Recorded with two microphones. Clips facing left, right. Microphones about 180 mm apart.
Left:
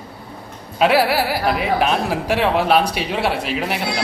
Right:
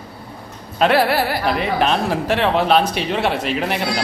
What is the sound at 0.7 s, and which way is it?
A woman's voice, 5° left (ahead or behind).